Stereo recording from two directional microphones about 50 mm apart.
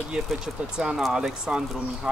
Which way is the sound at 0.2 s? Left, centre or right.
Centre.